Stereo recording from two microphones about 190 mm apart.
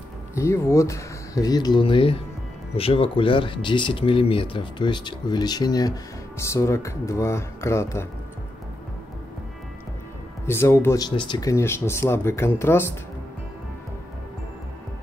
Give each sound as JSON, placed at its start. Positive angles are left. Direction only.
{"t": 0.3, "sound": "speech", "side_deg": 15}
{"t": 10.4, "sound": "speech", "side_deg": 15}